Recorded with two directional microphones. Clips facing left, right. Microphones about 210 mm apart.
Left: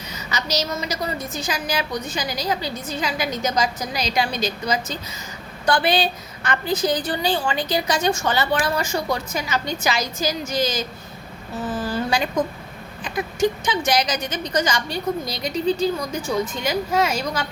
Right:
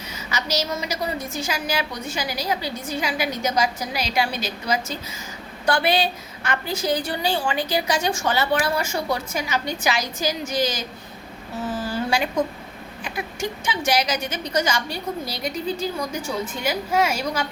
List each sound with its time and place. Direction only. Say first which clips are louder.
0.3 s a woman's voice: even; 10° right (ahead or behind)
11.6 s a sound: left 1 dB; 10° right (ahead or behind)
13.1 s a woman's voice: left 7 dB; 10° right (ahead or behind)